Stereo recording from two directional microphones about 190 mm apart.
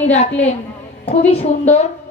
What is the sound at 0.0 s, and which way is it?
A woman's voice, 35° left (ahead or behind).